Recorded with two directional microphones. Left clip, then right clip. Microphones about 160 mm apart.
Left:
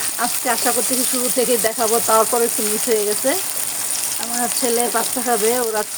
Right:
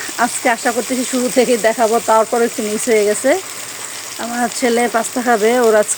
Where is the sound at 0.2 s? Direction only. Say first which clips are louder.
Right 6 dB; 35° right (ahead or behind).